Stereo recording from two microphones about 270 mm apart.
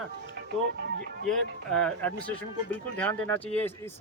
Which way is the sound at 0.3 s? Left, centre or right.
Right.